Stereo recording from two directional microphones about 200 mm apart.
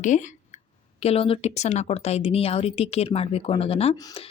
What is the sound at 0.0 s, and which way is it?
A woman's voice, 40° left (ahead or behind).